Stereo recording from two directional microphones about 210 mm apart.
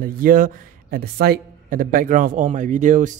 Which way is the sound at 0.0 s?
40° right (ahead or behind).